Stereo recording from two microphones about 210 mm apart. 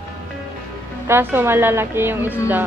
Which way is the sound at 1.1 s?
10° right (ahead or behind).